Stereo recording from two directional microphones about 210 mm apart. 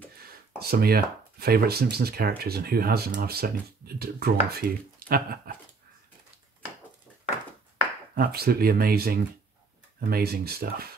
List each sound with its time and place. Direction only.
0.6 s speech: 45° right (ahead or behind)
8.2 s speech: 45° right (ahead or behind)